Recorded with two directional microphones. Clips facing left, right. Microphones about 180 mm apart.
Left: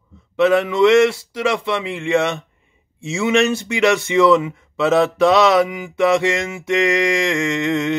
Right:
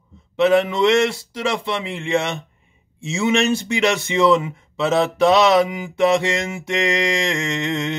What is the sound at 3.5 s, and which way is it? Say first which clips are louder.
Speech: left 2 dB; 35° right (ahead or behind).